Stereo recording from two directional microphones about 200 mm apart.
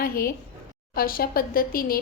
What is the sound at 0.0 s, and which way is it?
A woman's voice, 45° left (ahead or behind).